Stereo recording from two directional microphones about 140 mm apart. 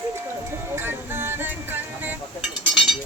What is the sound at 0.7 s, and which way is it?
Music, 15° right (ahead or behind).